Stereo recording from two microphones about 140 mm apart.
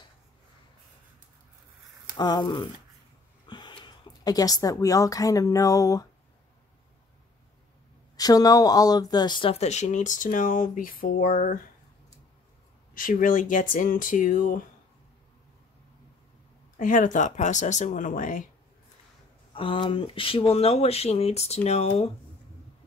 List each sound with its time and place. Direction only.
2.1 s a woman's voice: 30° left (ahead or behind)
8.2 s speech: 25° left (ahead or behind); by 11.6 s 75° left (ahead or behind)
12.9 s speech: 75° left (ahead or behind)
16.7 s speech: 70° left (ahead or behind)
19.5 s speech: 40° left (ahead or behind)